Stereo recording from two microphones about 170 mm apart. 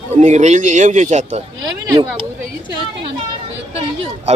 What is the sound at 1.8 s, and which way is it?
Speech, 20° right (ahead or behind).